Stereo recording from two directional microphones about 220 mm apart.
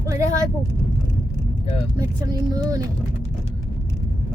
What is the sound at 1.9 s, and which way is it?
Speech, 15° right (ahead or behind).